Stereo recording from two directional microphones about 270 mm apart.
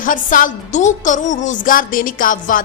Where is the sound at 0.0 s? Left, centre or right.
Left.